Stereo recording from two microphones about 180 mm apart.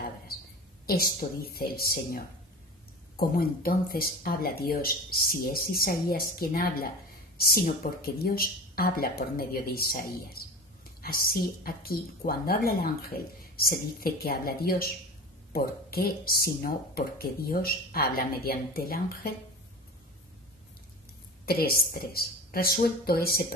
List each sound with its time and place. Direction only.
0.8 s a woman's voice: 55° left (ahead or behind)
21.5 s a woman's voice: 55° left (ahead or behind)